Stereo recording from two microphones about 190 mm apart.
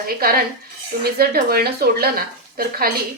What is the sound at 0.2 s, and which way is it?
Speech, 50° right (ahead or behind).